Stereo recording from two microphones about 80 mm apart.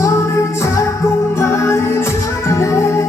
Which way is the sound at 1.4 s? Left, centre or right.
Left.